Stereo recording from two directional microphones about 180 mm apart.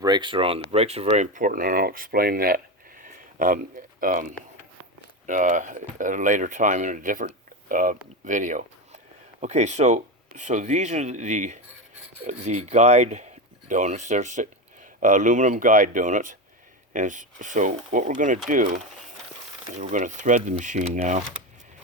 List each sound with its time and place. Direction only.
0.0 s speech: 25° right (ahead or behind); by 2.6 s 55° right (ahead or behind)
3.0 s a sound: 50° right (ahead or behind)
5.2 s speech: 45° right (ahead or behind)